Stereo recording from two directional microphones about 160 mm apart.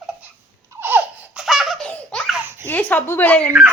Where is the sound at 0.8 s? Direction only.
10° right (ahead or behind).